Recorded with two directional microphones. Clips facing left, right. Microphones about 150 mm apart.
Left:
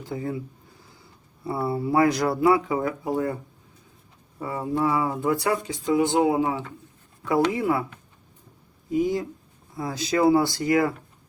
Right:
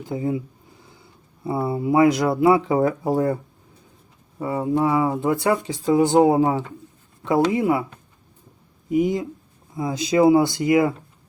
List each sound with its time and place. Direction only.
0.1 s speech: 20° right (ahead or behind)
1.5 s speech: 20° right (ahead or behind)
4.4 s speech: 20° right (ahead or behind)
7.3 s speech: 20° right (ahead or behind)
8.9 s speech: 20° right (ahead or behind)